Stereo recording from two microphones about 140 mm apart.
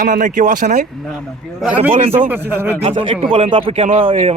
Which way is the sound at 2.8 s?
40° right (ahead or behind).